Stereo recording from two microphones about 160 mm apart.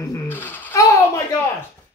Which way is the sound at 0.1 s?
10° left (ahead or behind).